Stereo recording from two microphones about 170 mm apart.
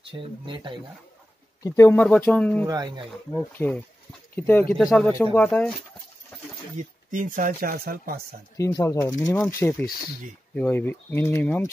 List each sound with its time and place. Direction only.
0.1 s speech: 30° right (ahead or behind)
1.6 s speech: 15° left (ahead or behind)
2.6 s speech: 25° right (ahead or behind)
3.3 s speech: 10° left (ahead or behind)
6.8 s speech: 50° right (ahead or behind)
8.5 s speech: 15° left (ahead or behind)